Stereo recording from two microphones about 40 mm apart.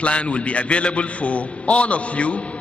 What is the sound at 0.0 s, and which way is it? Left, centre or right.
A man's voice, left.